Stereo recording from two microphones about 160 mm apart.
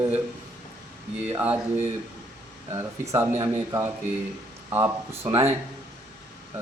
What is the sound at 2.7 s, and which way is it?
Speech, 25° right (ahead or behind).